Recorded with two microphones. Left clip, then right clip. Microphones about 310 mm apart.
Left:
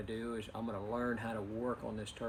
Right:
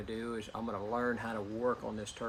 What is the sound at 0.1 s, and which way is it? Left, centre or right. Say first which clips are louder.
Speech: right 3 dB; centre.